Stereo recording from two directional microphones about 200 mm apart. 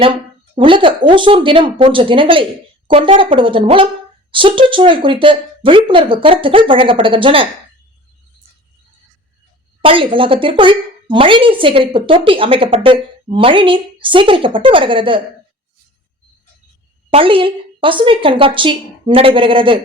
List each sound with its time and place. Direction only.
0.0 s a woman's voice: 25° right (ahead or behind)
9.8 s a woman's voice: 25° right (ahead or behind)
17.1 s a woman's voice: 25° right (ahead or behind)